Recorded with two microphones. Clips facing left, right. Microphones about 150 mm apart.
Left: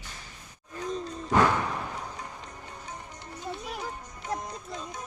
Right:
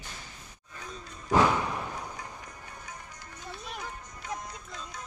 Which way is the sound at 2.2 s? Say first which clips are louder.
Left 2 dB; 25° left (ahead or behind).